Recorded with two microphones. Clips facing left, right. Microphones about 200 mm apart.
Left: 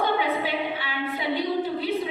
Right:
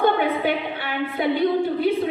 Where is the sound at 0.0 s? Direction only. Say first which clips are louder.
Right 5 dB; 55° right (ahead or behind).